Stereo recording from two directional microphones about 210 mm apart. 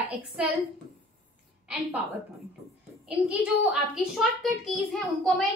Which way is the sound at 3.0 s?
5° right (ahead or behind).